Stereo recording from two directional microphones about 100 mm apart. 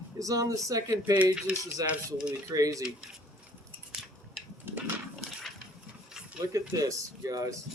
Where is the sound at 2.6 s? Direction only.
35° right (ahead or behind).